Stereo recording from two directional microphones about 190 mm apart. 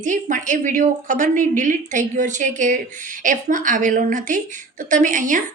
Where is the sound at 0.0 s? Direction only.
40° right (ahead or behind).